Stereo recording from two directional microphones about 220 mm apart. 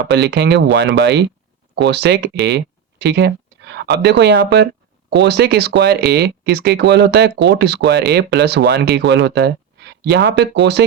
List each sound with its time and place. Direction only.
0.1 s speech: 50° right (ahead or behind)